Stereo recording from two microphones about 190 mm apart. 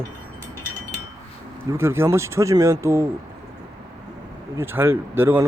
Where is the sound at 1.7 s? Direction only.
15° right (ahead or behind).